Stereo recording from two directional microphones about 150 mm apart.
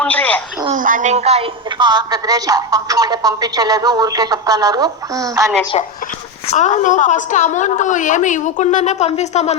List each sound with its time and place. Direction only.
0.0 s a sound: 10° left (ahead or behind)
0.7 s a woman's voice: 65° right (ahead or behind); by 1.5 s 45° right (ahead or behind)
1.8 s a woman's voice: 30° right (ahead or behind)
6.5 s a woman's voice: 55° left (ahead or behind)